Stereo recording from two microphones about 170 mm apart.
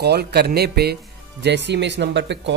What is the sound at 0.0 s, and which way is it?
Speech, 70° right (ahead or behind).